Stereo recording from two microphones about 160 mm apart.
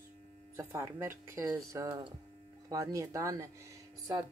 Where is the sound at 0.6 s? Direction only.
15° right (ahead or behind).